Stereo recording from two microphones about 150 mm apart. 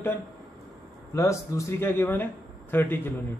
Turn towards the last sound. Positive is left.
turn(degrees=15)  # may be behind; listen again after turning